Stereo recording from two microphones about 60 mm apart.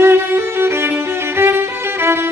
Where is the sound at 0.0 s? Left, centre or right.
Right.